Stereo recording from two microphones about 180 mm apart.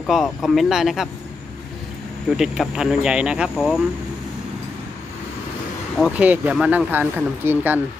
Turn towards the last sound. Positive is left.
turn(degrees=-10)  # may be behind; listen again after turning